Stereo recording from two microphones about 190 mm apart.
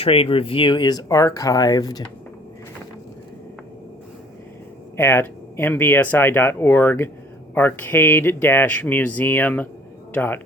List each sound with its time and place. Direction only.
0.0 s speech: 30° left (ahead or behind)
4.9 s speech: 10° left (ahead or behind)